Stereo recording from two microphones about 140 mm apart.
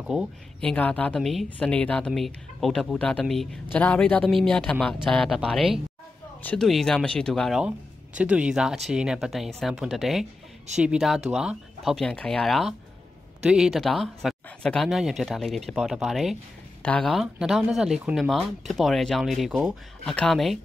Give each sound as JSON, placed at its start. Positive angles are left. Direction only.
{"t": 0.0, "sound": "speech", "side_deg": -5}
{"t": 0.6, "sound": "speech", "side_deg": 10}